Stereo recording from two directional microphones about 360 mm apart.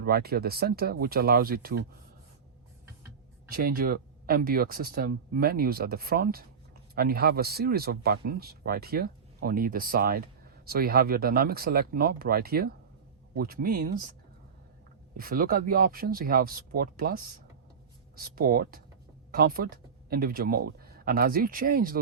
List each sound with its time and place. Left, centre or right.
0.0 s speech: right
3.5 s speech: right
15.2 s speech: right